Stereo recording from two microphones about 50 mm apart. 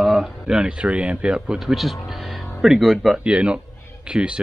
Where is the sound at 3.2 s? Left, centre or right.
Right.